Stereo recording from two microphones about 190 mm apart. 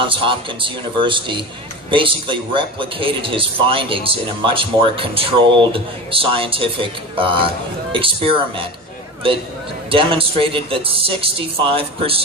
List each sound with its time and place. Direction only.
0.0 s a man's voice: 25° right (ahead or behind)
9.9 s a man's voice: 30° right (ahead or behind)